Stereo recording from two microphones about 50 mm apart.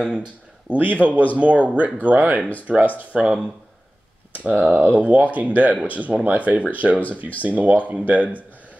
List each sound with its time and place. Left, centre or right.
0.7 s speech: right
4.7 s speech: right